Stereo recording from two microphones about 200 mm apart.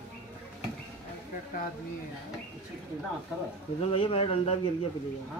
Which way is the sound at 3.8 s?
30° left (ahead or behind).